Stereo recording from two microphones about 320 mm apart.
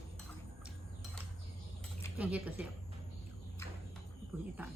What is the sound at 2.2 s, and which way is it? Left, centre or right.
Speech, centre.